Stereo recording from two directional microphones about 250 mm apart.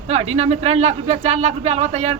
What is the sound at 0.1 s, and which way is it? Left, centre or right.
Speech, right.